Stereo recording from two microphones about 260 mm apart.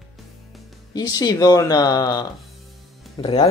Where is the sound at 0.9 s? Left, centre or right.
Centre.